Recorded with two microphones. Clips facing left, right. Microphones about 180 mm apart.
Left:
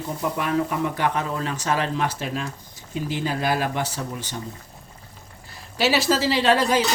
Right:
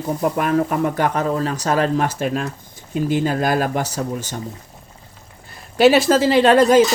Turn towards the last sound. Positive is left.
turn(degrees=-50)  # may be behind; listen again after turning